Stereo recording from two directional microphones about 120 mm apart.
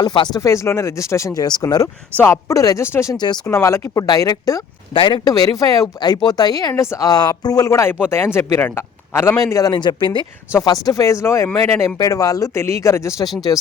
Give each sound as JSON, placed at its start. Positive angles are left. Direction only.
{"t": 0.0, "sound": "speech", "side_deg": 40}
{"t": 0.3, "sound": "speech", "side_deg": 25}
{"t": 2.1, "sound": "speech", "side_deg": 20}
{"t": 3.2, "sound": "speech", "side_deg": 35}
{"t": 3.5, "sound": "speech", "side_deg": 20}
{"t": 4.9, "sound": "speech", "side_deg": 40}
{"t": 10.5, "sound": "speech", "side_deg": 30}